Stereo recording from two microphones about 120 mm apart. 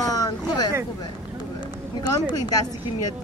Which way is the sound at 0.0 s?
30° left (ahead or behind).